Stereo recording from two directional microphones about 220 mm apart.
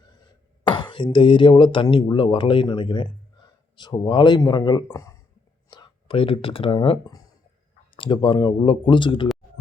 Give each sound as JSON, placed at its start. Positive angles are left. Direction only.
{"t": 0.7, "sound": "speech", "side_deg": 20}